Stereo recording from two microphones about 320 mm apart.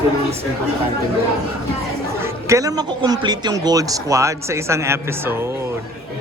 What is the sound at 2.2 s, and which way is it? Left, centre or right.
A man's voice, centre.